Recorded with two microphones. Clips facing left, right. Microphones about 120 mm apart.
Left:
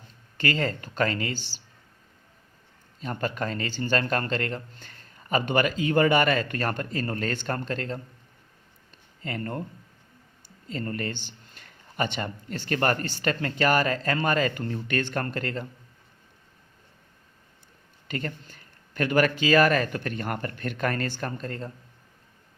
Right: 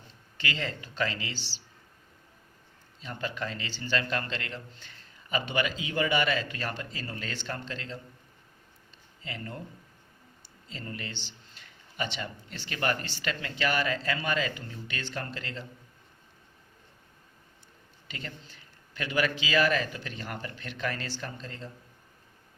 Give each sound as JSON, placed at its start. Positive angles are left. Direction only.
{"t": 0.3, "sound": "a man's voice", "side_deg": 45}
{"t": 3.0, "sound": "a man's voice", "side_deg": 50}
{"t": 9.2, "sound": "a man's voice", "side_deg": 50}
{"t": 10.7, "sound": "a man's voice", "side_deg": 50}
{"t": 18.1, "sound": "a man's voice", "side_deg": 50}